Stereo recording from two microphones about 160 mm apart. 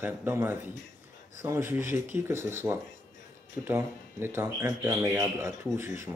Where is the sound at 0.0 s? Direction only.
15° right (ahead or behind).